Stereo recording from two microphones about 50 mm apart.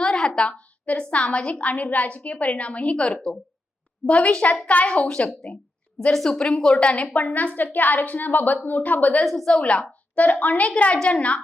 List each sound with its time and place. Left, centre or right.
0.0 s a sound: centre
0.9 s a woman's voice: left
6.1 s a woman's voice: centre; by 9.2 s left
9.2 s a woman's voice: centre
9.5 s a woman's voice: left